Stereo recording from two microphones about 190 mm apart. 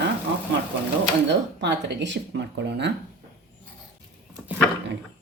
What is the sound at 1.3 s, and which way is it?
Speech, 65° right (ahead or behind).